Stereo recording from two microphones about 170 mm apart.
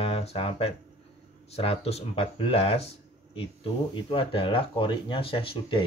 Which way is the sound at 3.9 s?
30° left (ahead or behind).